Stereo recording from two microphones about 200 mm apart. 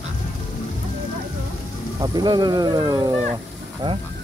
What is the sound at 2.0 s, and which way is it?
Speech, 20° right (ahead or behind).